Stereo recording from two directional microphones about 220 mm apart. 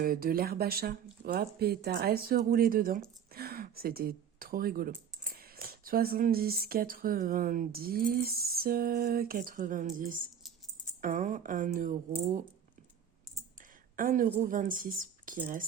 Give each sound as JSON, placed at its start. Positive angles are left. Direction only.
{"t": 0.0, "sound": "speech", "side_deg": -40}
{"t": 13.9, "sound": "speech", "side_deg": -40}